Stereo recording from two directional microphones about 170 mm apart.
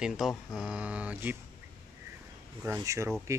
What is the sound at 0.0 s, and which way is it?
Speech, centre (ahead or behind).